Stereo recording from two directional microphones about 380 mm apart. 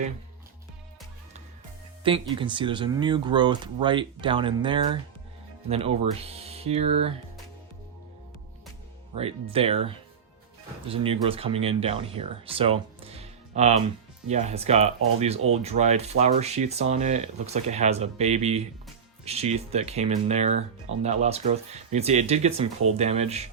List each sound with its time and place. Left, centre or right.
2.0 s speech: centre
9.1 s speech: centre